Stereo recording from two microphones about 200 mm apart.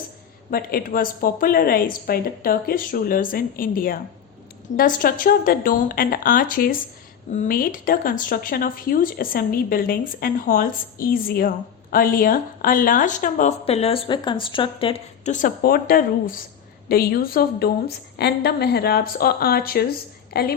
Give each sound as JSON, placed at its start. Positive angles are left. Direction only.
{"t": 0.5, "sound": "a woman's voice", "side_deg": 45}